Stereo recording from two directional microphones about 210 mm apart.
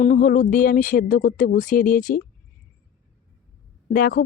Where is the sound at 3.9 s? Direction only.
40° left (ahead or behind).